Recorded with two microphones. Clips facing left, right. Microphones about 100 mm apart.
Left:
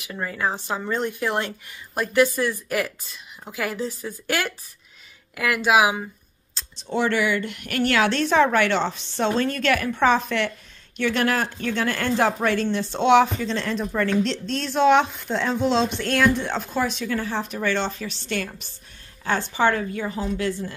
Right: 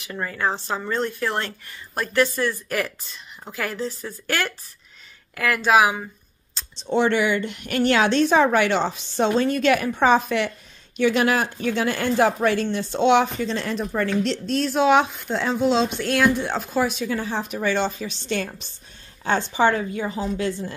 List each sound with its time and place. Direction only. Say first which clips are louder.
0.0 s speech: right 1 dB; 5° left (ahead or behind)
6.8 s a woman's voice: right 2 dB; 25° right (ahead or behind)